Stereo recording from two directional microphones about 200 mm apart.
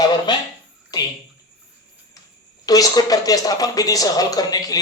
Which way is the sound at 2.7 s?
20° left (ahead or behind).